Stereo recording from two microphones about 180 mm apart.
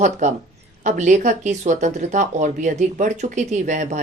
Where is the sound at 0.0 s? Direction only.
40° right (ahead or behind).